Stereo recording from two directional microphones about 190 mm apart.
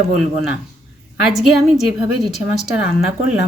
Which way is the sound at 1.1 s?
Centre (ahead or behind).